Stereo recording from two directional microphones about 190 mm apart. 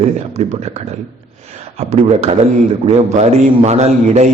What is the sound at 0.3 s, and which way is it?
A man's voice, 35° right (ahead or behind).